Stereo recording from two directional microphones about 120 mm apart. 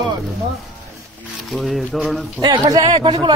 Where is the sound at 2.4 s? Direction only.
35° right (ahead or behind).